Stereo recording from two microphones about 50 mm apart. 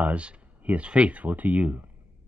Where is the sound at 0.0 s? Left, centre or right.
Right.